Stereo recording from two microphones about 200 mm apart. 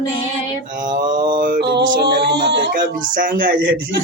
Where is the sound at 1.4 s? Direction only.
45° right (ahead or behind).